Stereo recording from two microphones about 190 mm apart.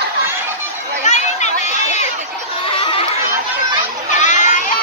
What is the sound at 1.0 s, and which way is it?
Chatter, 40° left (ahead or behind).